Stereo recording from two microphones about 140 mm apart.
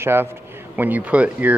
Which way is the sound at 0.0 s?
15° right (ahead or behind).